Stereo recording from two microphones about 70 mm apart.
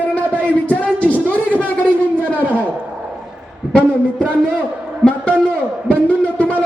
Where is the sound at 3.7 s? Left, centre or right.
Centre.